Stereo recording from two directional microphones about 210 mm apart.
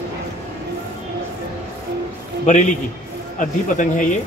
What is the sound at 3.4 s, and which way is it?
Speech, 35° left (ahead or behind).